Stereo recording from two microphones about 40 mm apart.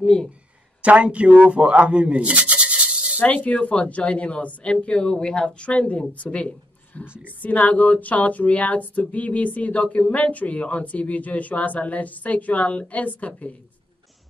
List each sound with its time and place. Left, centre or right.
0.0 s speech: centre
0.8 s speech: right
3.2 s speech: left
4.7 s speech: left